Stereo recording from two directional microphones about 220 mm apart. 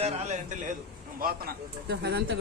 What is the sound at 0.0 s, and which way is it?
Speech, 30° right (ahead or behind).